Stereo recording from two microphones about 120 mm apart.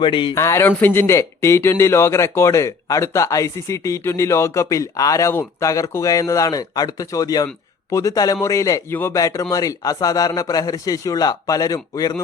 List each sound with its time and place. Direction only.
0.0 s speech: 45° left (ahead or behind)
0.3 s a man's voice: 25° left (ahead or behind)